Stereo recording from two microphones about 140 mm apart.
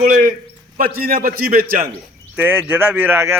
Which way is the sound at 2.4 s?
15° right (ahead or behind).